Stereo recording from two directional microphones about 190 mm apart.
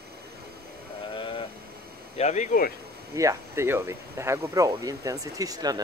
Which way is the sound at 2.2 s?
35° left (ahead or behind).